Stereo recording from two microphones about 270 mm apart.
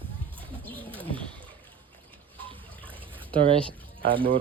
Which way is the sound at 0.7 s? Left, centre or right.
Centre.